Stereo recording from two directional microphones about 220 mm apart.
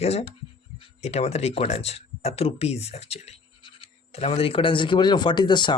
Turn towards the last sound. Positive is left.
turn(degrees=20)  # may be behind; listen again after turning